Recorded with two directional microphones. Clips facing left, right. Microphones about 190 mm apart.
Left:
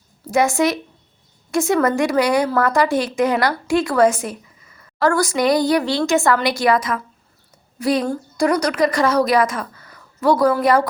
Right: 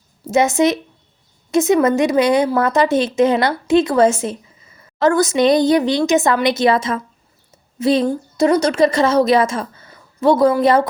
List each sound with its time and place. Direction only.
0.3 s a woman's voice: 20° right (ahead or behind)